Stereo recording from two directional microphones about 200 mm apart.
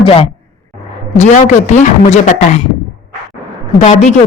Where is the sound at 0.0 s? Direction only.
30° left (ahead or behind).